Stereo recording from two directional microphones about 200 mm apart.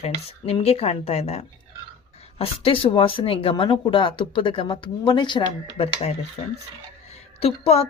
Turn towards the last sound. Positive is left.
turn(degrees=30)  # may be behind; listen again after turning